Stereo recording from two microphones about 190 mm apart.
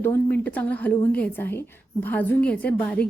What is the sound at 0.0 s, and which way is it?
A woman's voice, 10° left (ahead or behind).